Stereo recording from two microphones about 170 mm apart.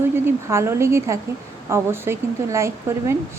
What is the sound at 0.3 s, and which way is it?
A woman's voice, 15° right (ahead or behind).